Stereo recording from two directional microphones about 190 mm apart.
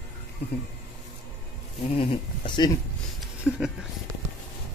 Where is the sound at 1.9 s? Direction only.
25° left (ahead or behind).